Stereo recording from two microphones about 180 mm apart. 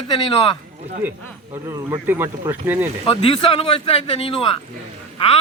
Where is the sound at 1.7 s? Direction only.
15° right (ahead or behind).